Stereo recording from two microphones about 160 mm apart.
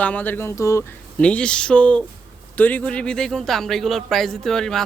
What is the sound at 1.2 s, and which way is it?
A man's voice, 5° left (ahead or behind).